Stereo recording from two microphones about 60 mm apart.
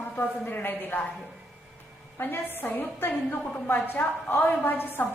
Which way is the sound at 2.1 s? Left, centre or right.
Left.